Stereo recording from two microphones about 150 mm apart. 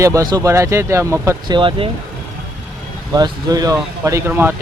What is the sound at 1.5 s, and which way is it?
Speech, 35° right (ahead or behind).